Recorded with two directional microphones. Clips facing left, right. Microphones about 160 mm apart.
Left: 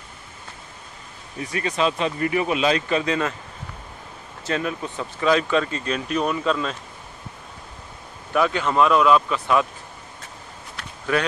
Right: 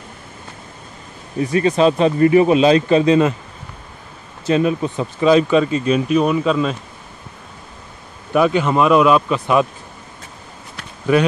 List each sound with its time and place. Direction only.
1.4 s speech: 30° right (ahead or behind)
4.5 s speech: 20° right (ahead or behind)
8.3 s speech: 15° right (ahead or behind)
11.1 s speech: 15° right (ahead or behind)